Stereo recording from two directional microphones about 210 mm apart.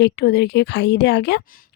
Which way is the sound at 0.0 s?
50° left (ahead or behind).